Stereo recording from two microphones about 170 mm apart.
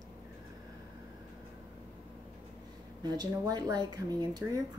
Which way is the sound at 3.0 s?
25° right (ahead or behind).